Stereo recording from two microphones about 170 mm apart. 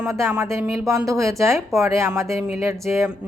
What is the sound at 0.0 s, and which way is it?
A woman's voice, 15° right (ahead or behind).